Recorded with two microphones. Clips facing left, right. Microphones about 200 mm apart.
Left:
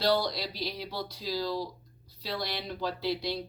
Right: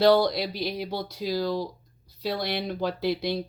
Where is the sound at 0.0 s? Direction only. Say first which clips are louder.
Right 8 dB; 55° right (ahead or behind).